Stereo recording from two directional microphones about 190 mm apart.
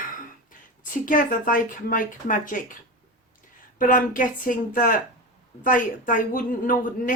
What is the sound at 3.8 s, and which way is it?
A woman's voice, 45° left (ahead or behind).